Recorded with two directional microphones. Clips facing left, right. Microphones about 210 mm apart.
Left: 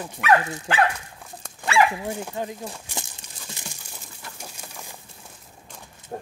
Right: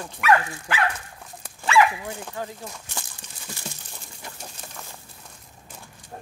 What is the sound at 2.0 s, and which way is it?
Speech, 15° left (ahead or behind).